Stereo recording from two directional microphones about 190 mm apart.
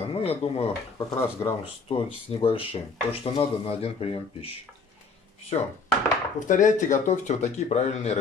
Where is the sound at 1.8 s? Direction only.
30° left (ahead or behind).